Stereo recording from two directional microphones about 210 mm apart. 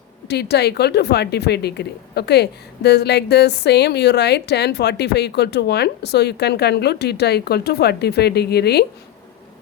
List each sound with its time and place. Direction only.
0.3 s a woman's voice: 50° left (ahead or behind)